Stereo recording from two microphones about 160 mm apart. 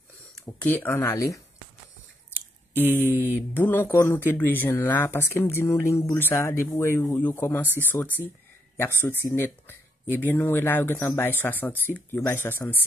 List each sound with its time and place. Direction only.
0.6 s speech: 10° left (ahead or behind)
2.8 s speech: 10° left (ahead or behind)
9.2 s speech: 15° left (ahead or behind)